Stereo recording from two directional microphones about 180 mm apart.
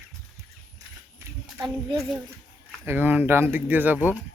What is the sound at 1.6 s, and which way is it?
Speech, centre (ahead or behind).